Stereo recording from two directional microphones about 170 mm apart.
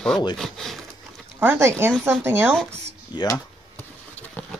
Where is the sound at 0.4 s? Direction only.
Centre (ahead or behind).